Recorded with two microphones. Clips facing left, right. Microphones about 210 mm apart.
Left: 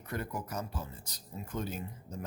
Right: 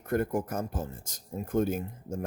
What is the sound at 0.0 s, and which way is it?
Speech, 50° right (ahead or behind).